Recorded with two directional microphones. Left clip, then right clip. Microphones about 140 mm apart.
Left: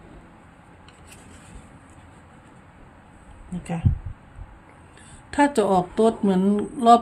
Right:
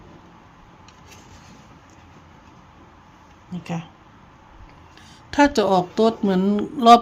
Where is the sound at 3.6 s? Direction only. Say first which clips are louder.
Right 1 dB; 5° right (ahead or behind).